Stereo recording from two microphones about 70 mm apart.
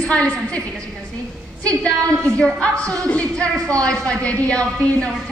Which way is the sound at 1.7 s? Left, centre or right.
Centre.